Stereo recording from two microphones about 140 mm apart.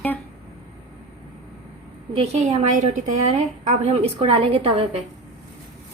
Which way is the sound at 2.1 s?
45° right (ahead or behind).